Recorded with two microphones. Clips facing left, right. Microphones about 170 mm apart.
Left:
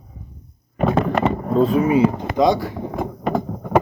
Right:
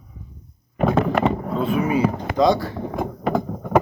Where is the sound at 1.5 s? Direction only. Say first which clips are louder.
Left 6 dB; 40° left (ahead or behind).